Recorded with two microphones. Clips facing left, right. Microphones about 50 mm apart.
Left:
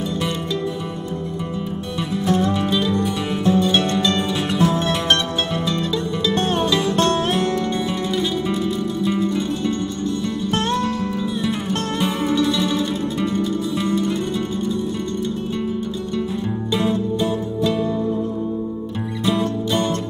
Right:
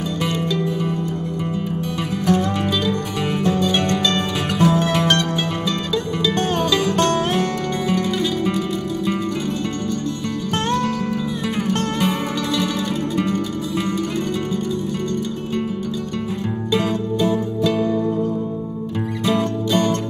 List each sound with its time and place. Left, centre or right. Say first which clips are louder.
9.0 s music: left 3 dB; right
11.7 s music: right 1 dB; right